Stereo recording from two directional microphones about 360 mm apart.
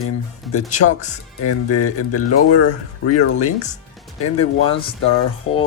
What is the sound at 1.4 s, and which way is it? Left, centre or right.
Speech, left.